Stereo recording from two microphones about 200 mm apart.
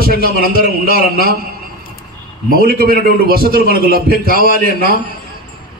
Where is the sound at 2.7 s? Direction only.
45° right (ahead or behind).